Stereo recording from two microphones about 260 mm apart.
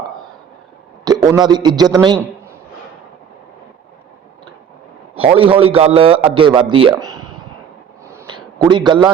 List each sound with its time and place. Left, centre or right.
1.0 s a man's voice: centre
5.1 s a man's voice: right
8.0 s a sound: centre